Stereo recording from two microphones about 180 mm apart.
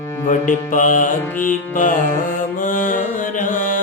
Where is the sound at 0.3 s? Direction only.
45° left (ahead or behind).